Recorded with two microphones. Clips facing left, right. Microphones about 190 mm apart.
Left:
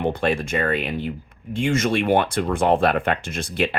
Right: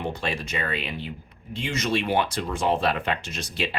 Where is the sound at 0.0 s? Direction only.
55° left (ahead or behind).